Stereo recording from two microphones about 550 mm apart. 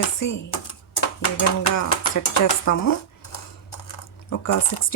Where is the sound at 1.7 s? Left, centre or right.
Left.